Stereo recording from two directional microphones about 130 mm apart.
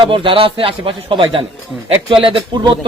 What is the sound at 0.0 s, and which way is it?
A man's voice, 40° right (ahead or behind).